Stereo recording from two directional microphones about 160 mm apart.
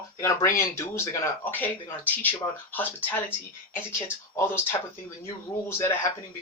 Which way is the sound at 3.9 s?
15° left (ahead or behind).